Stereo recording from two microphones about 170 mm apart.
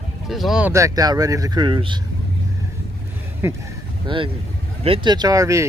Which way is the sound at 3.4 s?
15° right (ahead or behind).